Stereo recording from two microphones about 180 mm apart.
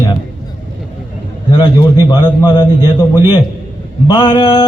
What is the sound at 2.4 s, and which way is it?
Speech, 25° left (ahead or behind).